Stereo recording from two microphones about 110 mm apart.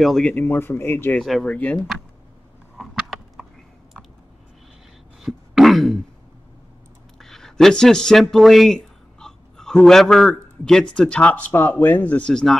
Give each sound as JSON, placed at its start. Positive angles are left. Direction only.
{"t": 0.0, "sound": "speech", "side_deg": 0}
{"t": 0.3, "sound": "speech", "side_deg": 20}
{"t": 1.1, "sound": "speech", "side_deg": 5}
{"t": 2.8, "sound": "a sound", "side_deg": 0}
{"t": 5.2, "sound": "a sound", "side_deg": 0}
{"t": 7.2, "sound": "speech", "side_deg": 5}